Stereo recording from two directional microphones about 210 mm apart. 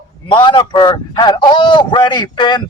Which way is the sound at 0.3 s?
20° left (ahead or behind).